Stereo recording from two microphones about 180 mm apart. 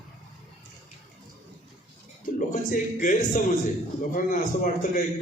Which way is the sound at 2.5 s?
50° left (ahead or behind).